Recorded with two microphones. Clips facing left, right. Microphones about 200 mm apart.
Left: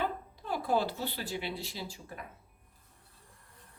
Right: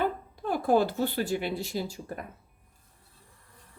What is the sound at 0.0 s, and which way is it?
Speech, 50° right (ahead or behind).